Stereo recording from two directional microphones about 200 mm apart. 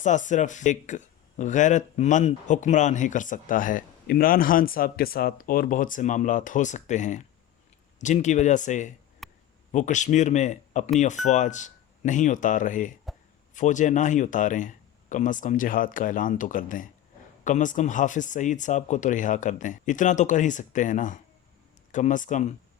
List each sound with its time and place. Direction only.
0.0 s speech: 40° left (ahead or behind)
9.2 s a sound: centre (ahead or behind)
9.7 s speech: 40° left (ahead or behind)